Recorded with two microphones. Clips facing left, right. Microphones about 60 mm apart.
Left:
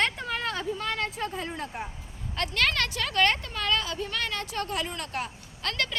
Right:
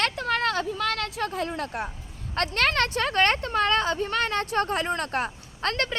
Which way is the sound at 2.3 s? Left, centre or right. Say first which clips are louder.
Right 3 dB; right.